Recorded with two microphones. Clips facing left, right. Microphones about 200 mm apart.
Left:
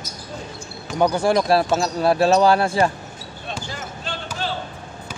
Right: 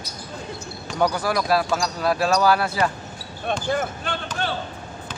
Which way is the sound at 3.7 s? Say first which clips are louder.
Right 8 dB; 55° right (ahead or behind).